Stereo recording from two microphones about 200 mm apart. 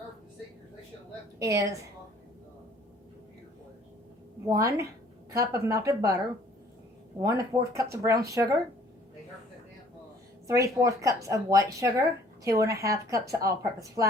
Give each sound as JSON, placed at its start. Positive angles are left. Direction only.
{"t": 1.4, "sound": "speech", "side_deg": -15}
{"t": 4.4, "sound": "speech", "side_deg": -15}
{"t": 7.2, "sound": "speech", "side_deg": -15}
{"t": 10.4, "sound": "speech", "side_deg": -15}